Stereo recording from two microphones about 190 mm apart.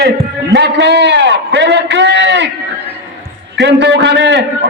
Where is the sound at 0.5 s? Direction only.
65° right (ahead or behind).